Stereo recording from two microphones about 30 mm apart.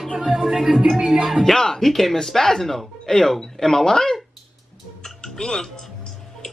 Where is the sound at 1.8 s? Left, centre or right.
Centre.